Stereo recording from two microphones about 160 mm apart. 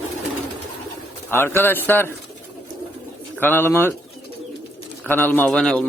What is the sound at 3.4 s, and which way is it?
Speech, 15° left (ahead or behind).